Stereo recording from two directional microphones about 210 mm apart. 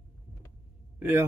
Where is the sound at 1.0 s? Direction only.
10° right (ahead or behind).